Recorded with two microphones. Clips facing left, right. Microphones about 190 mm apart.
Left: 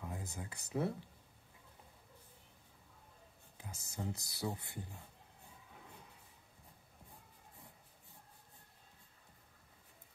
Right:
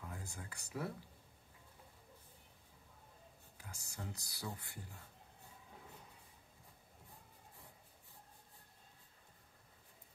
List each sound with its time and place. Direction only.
0.0 s speech: 20° left (ahead or behind)
3.5 s speech: 20° left (ahead or behind)